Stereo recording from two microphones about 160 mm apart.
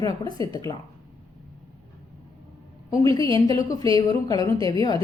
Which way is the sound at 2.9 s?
20° left (ahead or behind).